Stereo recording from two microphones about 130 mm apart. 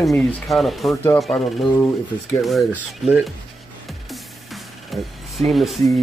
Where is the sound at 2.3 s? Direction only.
Centre (ahead or behind).